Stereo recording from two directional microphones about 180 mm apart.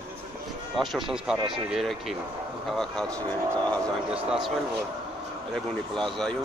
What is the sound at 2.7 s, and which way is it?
Speech, 5° left (ahead or behind).